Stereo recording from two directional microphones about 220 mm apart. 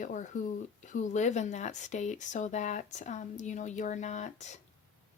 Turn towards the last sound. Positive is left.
turn(degrees=30)  # may be behind; listen again after turning